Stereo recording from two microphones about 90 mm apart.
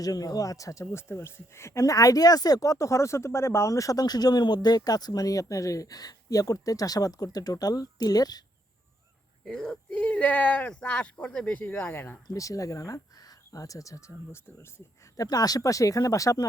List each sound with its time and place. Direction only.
0.0 s speech: 45° left (ahead or behind)
9.4 s speech: 10° left (ahead or behind); by 12.2 s 25° left (ahead or behind)
12.3 s speech: 40° left (ahead or behind)
15.1 s speech: 40° left (ahead or behind)